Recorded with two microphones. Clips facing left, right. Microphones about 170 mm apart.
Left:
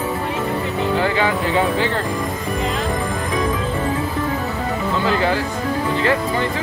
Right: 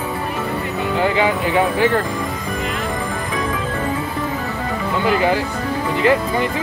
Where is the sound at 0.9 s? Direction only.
20° right (ahead or behind).